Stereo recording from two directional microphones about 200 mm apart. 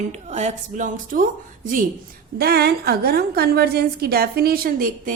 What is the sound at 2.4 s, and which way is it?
A woman's voice, 50° right (ahead or behind).